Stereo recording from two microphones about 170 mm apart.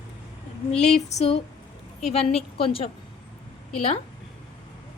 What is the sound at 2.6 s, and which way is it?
Speech, 35° left (ahead or behind).